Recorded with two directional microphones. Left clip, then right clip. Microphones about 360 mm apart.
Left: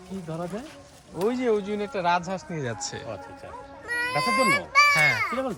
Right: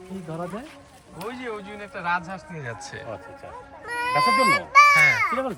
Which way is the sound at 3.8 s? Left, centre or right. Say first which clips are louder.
Right 4 dB; centre.